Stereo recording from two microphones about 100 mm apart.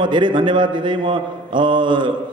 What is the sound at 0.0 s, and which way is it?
A man's voice, 50° right (ahead or behind).